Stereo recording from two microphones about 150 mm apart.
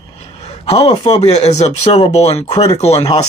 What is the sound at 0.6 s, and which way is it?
Speech, 40° left (ahead or behind).